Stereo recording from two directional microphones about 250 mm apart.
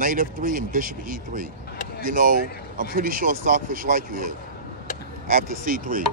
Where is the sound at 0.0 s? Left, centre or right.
Right.